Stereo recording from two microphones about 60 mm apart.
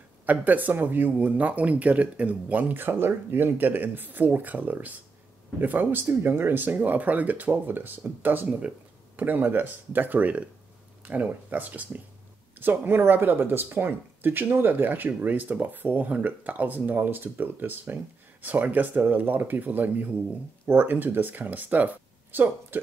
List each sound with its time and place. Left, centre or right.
0.3 s speech: right
2.7 s speech: right